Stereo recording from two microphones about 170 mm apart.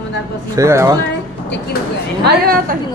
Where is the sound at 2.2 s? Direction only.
65° right (ahead or behind).